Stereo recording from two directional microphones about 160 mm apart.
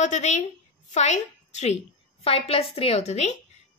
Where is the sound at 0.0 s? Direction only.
45° left (ahead or behind).